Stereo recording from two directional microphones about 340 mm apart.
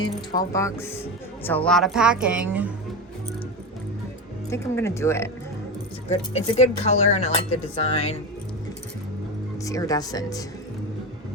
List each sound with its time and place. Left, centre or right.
0.0 s a woman's voice: centre
4.4 s speech: centre
6.1 s speech: centre
9.6 s speech: centre